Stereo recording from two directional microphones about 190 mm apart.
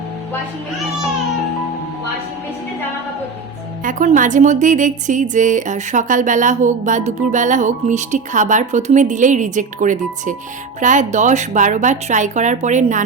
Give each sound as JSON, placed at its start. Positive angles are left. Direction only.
{"t": 3.8, "sound": "a woman's voice", "side_deg": -40}